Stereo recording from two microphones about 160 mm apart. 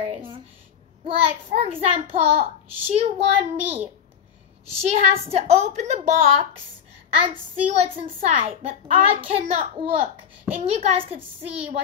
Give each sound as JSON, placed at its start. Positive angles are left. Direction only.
{"t": 0.0, "sound": "a sound", "side_deg": -35}
{"t": 1.0, "sound": "a child's voice", "side_deg": -35}
{"t": 7.7, "sound": "a child's voice", "side_deg": -40}